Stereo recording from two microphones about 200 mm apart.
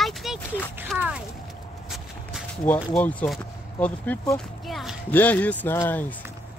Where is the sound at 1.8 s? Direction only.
Centre (ahead or behind).